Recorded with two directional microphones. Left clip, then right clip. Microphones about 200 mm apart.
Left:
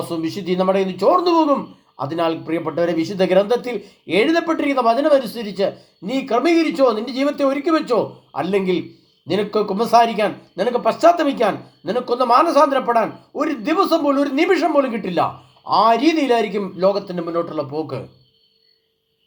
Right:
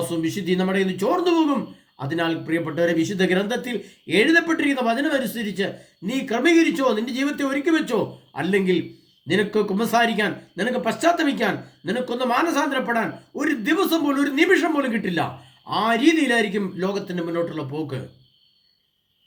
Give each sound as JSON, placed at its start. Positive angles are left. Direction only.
{"t": 0.1, "sound": "speech", "side_deg": -10}